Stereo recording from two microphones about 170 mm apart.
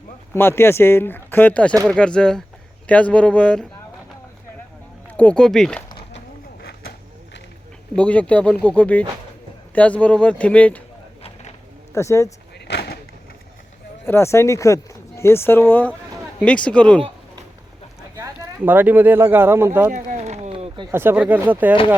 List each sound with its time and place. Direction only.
0.3 s speech: 15° left (ahead or behind)
5.0 s speech: 10° left (ahead or behind)
7.9 s speech: 5° left (ahead or behind)
11.9 s speech: 15° left (ahead or behind)
12.5 s a sound: 80° left
14.0 s speech: 15° left (ahead or behind)
18.2 s speech: 10° right (ahead or behind)
19.9 s a sound: 45° right (ahead or behind)
20.9 s speech: 10° right (ahead or behind)